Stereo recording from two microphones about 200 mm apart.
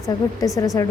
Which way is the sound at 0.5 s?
15° left (ahead or behind).